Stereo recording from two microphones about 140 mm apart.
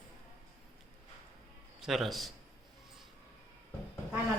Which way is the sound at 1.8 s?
Centre (ahead or behind).